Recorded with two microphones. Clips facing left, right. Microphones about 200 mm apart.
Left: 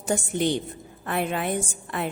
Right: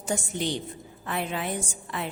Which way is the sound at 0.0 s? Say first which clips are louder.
Left 5 dB; 55° left (ahead or behind).